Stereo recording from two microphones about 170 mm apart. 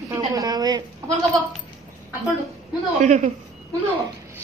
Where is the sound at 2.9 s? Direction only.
45° right (ahead or behind).